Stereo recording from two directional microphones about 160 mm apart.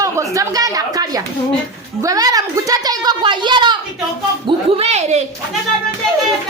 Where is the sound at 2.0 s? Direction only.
25° right (ahead or behind); by 5.2 s 40° right (ahead or behind).